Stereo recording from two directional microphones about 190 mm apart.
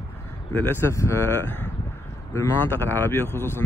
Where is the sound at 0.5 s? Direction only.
10° left (ahead or behind).